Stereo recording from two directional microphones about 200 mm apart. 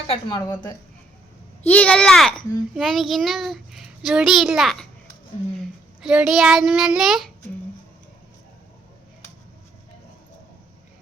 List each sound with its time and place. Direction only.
0.1 s a woman's voice: 25° left (ahead or behind)
1.6 s a child's voice: 10° left (ahead or behind)
6.0 s a child's voice: 5° right (ahead or behind)